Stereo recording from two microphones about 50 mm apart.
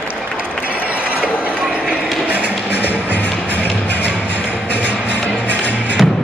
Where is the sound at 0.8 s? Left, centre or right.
Right.